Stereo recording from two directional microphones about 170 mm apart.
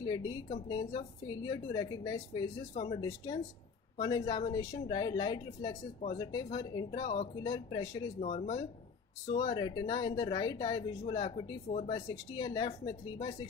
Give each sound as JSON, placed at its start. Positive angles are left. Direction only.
{"t": 0.0, "sound": "a woman's voice", "side_deg": 25}
{"t": 2.7, "sound": "speech", "side_deg": 40}
{"t": 4.0, "sound": "a woman's voice", "side_deg": 25}
{"t": 8.2, "sound": "speech", "side_deg": 40}
{"t": 9.3, "sound": "a woman's voice", "side_deg": 30}